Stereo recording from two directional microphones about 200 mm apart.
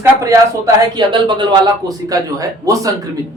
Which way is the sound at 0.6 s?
25° right (ahead or behind).